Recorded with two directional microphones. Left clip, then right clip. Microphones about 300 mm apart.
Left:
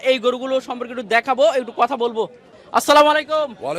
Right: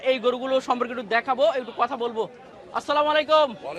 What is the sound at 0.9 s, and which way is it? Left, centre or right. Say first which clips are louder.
Speech: left 11 dB; left.